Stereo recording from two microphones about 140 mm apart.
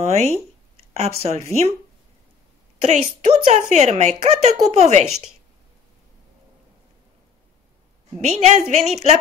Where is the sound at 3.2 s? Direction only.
55° right (ahead or behind).